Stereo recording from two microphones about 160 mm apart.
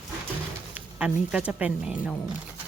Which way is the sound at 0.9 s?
5° right (ahead or behind).